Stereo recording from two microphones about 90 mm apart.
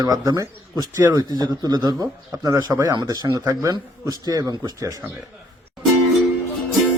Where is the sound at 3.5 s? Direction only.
35° right (ahead or behind).